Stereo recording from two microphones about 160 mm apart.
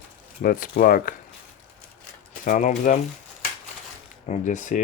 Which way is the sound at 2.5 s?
55° left (ahead or behind).